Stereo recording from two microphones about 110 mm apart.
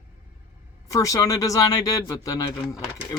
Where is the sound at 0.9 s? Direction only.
30° left (ahead or behind).